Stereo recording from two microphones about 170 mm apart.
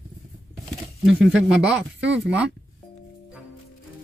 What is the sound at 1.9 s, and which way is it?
Speech, 90° right.